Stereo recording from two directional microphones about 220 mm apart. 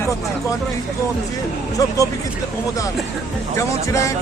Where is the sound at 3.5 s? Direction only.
15° left (ahead or behind).